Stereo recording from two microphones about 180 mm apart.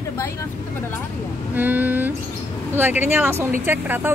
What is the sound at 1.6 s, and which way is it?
Speech, 10° right (ahead or behind).